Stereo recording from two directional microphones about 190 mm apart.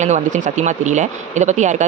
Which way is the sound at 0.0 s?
40° right (ahead or behind).